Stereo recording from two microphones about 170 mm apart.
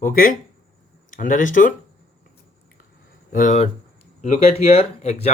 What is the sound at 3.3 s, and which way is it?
Speech, 45° left (ahead or behind).